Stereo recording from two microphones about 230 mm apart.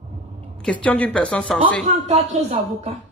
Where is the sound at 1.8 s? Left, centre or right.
Right.